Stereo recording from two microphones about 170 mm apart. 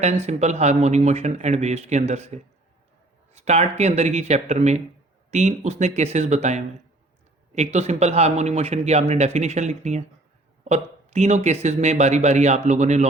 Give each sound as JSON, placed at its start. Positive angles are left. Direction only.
{"t": 0.0, "sound": "a man's voice", "side_deg": -40}